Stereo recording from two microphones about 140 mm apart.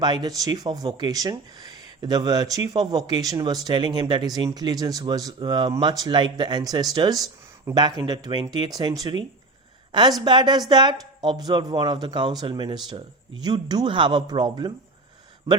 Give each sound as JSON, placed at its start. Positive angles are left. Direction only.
{"t": 0.0, "sound": "speech", "side_deg": -30}